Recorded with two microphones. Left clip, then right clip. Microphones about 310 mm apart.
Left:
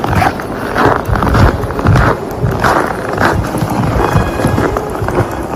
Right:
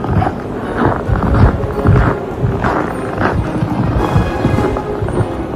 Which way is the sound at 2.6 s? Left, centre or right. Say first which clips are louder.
Left 6 dB; left.